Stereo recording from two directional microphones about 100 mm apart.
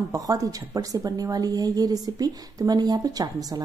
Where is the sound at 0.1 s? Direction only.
35° right (ahead or behind).